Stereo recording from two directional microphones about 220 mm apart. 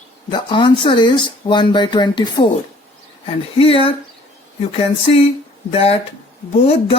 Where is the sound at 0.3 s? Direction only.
20° left (ahead or behind).